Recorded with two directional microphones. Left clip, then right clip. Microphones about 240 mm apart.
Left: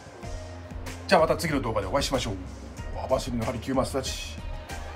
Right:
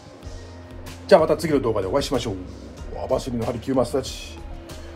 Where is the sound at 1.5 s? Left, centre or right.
Left.